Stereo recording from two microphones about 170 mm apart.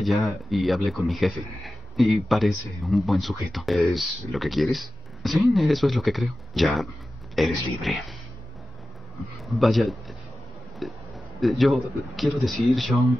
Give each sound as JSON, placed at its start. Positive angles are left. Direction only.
{"t": 0.0, "sound": "a man's voice", "side_deg": 0}
{"t": 9.2, "sound": "a man's voice", "side_deg": 0}